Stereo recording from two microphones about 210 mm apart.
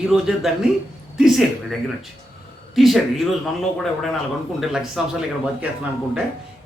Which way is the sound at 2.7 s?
Centre (ahead or behind).